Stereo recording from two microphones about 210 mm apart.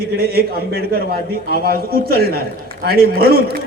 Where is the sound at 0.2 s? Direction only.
45° right (ahead or behind).